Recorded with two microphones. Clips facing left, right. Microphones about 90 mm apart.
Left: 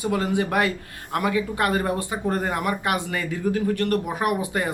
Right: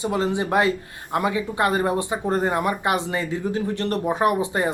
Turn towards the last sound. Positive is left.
turn(degrees=-25)  # may be behind; listen again after turning